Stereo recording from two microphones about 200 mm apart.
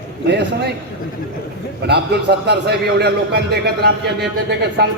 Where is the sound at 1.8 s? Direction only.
55° right (ahead or behind).